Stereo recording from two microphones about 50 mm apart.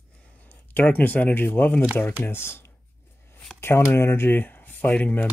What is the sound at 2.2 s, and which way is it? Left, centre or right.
Speech, left.